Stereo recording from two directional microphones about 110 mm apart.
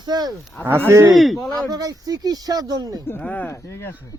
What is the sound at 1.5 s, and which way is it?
Speech, 35° right (ahead or behind).